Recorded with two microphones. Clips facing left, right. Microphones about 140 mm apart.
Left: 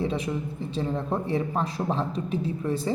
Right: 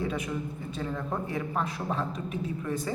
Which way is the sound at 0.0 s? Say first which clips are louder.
Left 4 dB; 30° left (ahead or behind).